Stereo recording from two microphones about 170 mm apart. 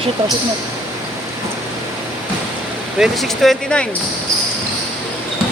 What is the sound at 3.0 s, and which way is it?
Speech, centre (ahead or behind).